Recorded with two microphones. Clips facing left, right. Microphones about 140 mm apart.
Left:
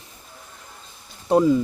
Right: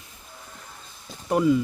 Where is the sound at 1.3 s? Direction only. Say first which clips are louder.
Left 3 dB; 30° left (ahead or behind).